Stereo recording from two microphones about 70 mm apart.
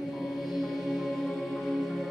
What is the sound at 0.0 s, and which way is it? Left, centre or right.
Music, centre.